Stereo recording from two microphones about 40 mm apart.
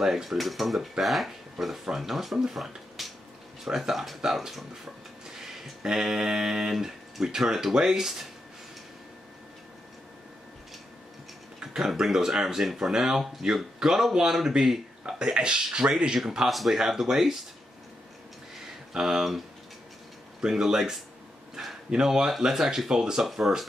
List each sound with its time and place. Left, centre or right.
0.0 s speech: centre
5.9 s speech: centre
11.6 s a sound: centre
12.0 s speech: centre
16.4 s speech: centre
18.9 s speech: centre
21.6 s a sound: centre
21.9 s speech: centre
23.2 s speech: centre